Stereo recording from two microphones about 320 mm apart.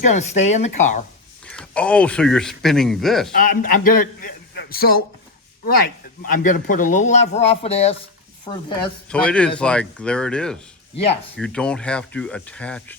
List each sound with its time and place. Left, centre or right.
0.0 s speech: left
1.5 s speech: centre
3.7 s a man's voice: left; by 13.0 s centre